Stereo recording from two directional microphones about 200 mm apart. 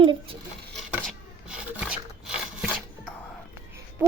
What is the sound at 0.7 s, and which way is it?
Filing, centre (ahead or behind).